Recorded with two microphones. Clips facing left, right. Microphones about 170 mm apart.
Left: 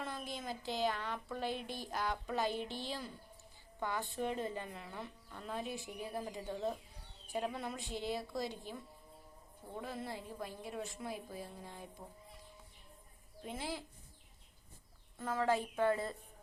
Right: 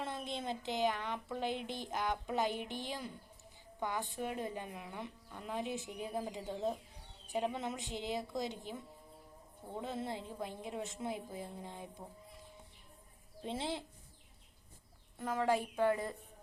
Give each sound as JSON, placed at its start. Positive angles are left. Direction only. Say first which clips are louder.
{"t": 0.0, "sound": "speech", "louder": "right 3 dB", "side_deg": -25}
{"t": 13.4, "sound": "speech", "louder": "right 3 dB", "side_deg": -25}
{"t": 15.2, "sound": "speech", "louder": "right 1 dB", "side_deg": -15}